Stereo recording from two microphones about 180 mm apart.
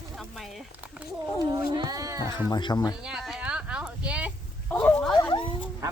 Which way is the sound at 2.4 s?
25° left (ahead or behind).